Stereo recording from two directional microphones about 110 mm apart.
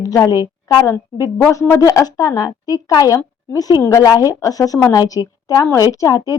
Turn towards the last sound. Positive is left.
turn(degrees=35)  # may be behind; listen again after turning